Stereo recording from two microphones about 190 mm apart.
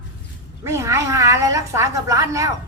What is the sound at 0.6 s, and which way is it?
A man's voice, 15° right (ahead or behind).